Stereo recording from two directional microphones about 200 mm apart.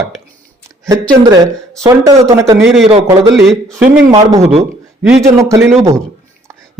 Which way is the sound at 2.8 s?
30° right (ahead or behind).